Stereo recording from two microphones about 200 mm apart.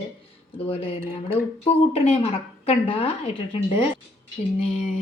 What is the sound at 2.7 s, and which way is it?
Speech, 30° left (ahead or behind).